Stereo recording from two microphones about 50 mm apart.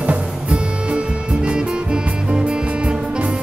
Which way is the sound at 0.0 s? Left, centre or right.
Right.